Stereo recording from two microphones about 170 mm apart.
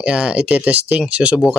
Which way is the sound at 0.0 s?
5° right (ahead or behind).